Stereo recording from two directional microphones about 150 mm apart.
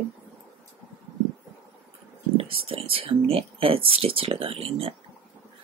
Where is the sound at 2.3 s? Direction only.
40° right (ahead or behind).